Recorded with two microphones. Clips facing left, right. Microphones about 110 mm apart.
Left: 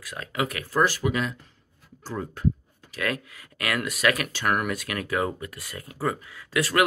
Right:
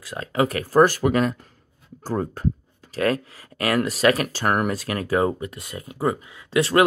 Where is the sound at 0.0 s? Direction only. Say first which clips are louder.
Right 7 dB; 30° right (ahead or behind).